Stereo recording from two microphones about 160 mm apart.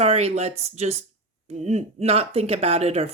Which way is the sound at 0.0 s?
40° right (ahead or behind).